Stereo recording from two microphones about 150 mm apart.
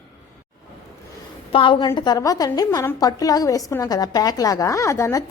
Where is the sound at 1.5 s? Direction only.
35° left (ahead or behind).